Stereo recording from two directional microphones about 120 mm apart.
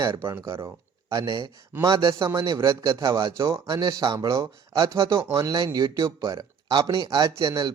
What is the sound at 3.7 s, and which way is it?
A man's voice, 35° right (ahead or behind).